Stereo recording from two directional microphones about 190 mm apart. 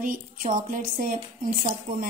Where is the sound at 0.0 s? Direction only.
45° right (ahead or behind).